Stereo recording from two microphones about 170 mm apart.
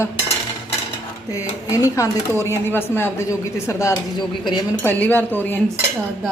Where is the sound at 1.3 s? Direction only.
20° left (ahead or behind).